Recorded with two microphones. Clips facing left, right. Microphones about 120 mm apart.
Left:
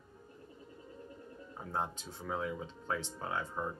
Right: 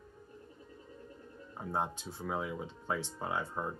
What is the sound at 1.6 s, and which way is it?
Speech, 15° right (ahead or behind).